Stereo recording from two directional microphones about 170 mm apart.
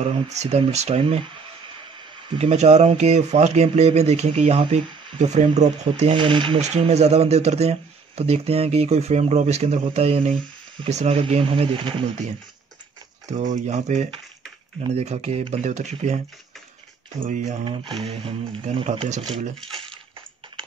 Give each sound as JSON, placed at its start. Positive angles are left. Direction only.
{"t": 0.3, "sound": "speech", "side_deg": -40}
{"t": 2.3, "sound": "speech", "side_deg": -40}
{"t": 6.1, "sound": "speech", "side_deg": -30}
{"t": 6.6, "sound": "speech", "side_deg": -40}
{"t": 13.3, "sound": "speech", "side_deg": -45}
{"t": 17.2, "sound": "speech", "side_deg": -45}
{"t": 17.6, "sound": "speech", "side_deg": -30}
{"t": 19.7, "sound": "crushing", "side_deg": -30}